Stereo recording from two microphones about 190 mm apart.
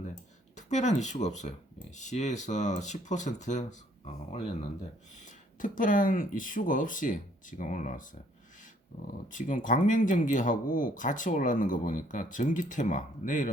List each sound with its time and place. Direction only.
0.5 s speech: 40° left (ahead or behind)
5.5 s speech: 45° left (ahead or behind)
9.3 s speech: 45° left (ahead or behind)